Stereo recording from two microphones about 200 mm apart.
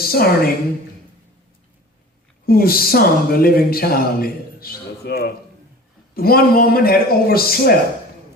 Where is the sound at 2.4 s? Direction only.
50° left (ahead or behind).